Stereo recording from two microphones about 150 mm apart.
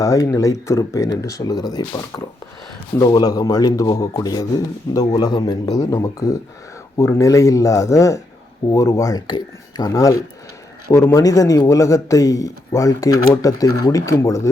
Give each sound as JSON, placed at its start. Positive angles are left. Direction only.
{"t": 0.0, "sound": "speech", "side_deg": 20}